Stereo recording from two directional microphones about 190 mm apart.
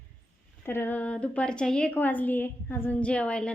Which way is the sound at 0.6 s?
10° left (ahead or behind).